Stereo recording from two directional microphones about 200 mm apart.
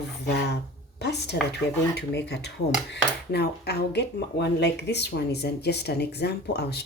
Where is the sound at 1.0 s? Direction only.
55° left (ahead or behind).